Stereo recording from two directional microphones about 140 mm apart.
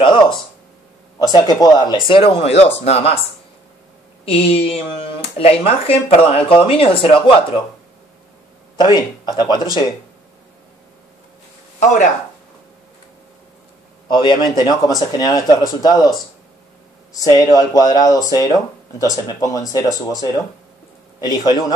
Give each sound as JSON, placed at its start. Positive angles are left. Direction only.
{"t": 1.2, "sound": "speech", "side_deg": 30}
{"t": 4.3, "sound": "speech", "side_deg": 45}
{"t": 8.7, "sound": "speech", "side_deg": 30}
{"t": 14.0, "sound": "speech", "side_deg": 35}